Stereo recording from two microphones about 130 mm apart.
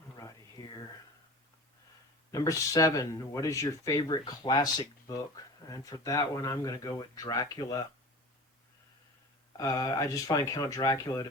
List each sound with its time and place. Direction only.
0.2 s a sound: 25° left (ahead or behind)
2.3 s speech: 25° left (ahead or behind)
9.5 s speech: 25° left (ahead or behind)